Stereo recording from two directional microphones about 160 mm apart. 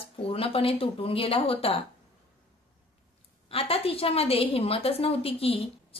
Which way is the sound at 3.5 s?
35° left (ahead or behind).